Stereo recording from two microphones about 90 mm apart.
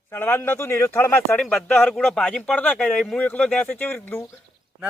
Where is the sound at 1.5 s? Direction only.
15° left (ahead or behind).